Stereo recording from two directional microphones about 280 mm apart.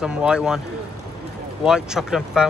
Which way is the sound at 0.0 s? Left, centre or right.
Centre.